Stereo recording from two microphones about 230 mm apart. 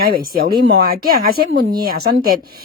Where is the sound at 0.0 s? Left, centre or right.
Right.